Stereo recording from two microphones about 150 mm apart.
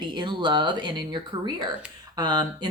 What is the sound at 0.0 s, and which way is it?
A woman's voice, 30° right (ahead or behind).